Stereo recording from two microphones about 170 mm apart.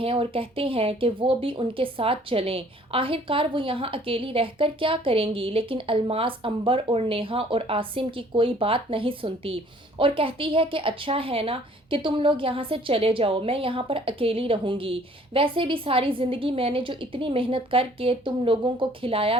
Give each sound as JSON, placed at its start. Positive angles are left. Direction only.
{"t": 0.0, "sound": "speech", "side_deg": -30}